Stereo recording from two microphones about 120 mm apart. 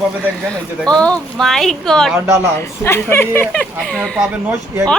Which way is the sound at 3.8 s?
5° left (ahead or behind).